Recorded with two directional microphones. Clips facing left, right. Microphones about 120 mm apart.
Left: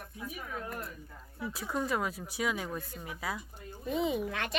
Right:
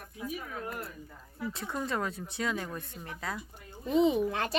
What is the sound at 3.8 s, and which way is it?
Speech, 30° right (ahead or behind).